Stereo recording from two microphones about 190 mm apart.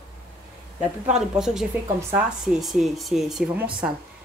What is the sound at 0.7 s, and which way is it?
A woman's voice, 5° right (ahead or behind).